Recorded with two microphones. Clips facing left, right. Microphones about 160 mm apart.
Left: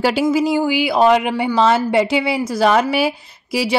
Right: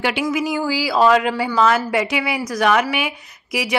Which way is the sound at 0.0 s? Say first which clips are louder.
Left 5 dB; 35° left (ahead or behind).